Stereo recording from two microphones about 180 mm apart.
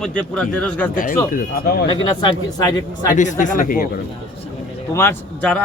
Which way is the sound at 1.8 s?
25° left (ahead or behind).